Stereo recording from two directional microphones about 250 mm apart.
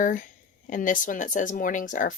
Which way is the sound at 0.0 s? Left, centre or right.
Left.